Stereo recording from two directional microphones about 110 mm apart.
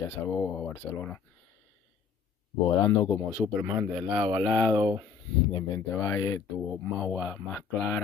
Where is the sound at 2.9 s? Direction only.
25° left (ahead or behind).